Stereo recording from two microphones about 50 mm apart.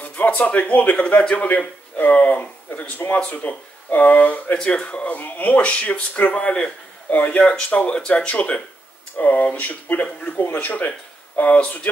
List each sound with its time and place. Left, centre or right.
0.0 s speech: left